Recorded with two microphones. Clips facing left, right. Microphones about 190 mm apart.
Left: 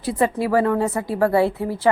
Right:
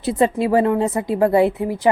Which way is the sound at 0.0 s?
20° right (ahead or behind).